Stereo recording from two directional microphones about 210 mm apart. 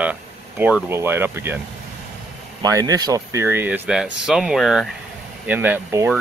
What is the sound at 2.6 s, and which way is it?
Speech, 15° right (ahead or behind).